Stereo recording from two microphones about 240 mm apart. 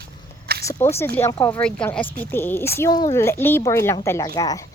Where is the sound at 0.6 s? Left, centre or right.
Centre.